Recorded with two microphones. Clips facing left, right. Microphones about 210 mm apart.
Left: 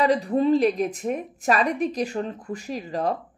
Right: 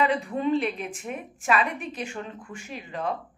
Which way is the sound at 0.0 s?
35° left (ahead or behind).